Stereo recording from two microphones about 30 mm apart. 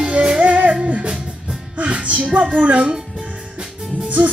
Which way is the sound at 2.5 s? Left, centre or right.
Right.